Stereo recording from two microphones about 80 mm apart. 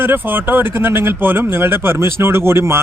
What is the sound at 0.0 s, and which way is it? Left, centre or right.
A man's voice, right.